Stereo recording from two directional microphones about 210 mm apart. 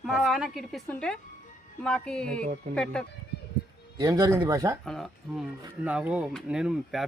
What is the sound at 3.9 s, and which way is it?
Speech, 20° right (ahead or behind).